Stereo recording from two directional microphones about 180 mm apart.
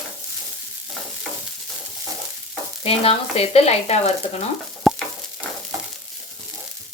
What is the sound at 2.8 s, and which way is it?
Speech, 35° left (ahead or behind).